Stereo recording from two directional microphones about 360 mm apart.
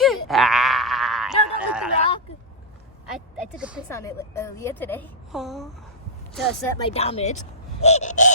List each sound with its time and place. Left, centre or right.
0.0 s a sound: centre
3.6 s a woman's voice: centre
6.7 s speech: centre